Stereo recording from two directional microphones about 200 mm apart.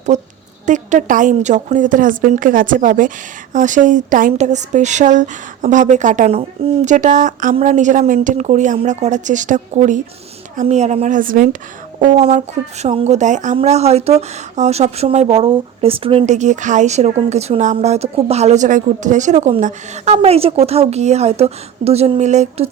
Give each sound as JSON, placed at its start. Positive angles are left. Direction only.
{"t": 0.1, "sound": "speech", "side_deg": -35}